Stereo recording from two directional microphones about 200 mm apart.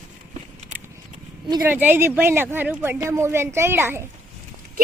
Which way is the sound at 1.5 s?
20° right (ahead or behind).